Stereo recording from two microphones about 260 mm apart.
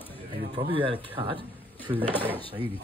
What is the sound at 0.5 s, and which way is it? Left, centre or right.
Speech, centre.